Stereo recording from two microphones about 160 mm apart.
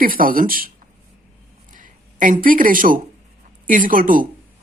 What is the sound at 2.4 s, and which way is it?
Speech, 60° right (ahead or behind).